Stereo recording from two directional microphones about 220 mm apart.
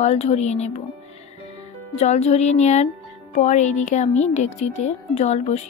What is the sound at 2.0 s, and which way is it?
Speech, 30° left (ahead or behind).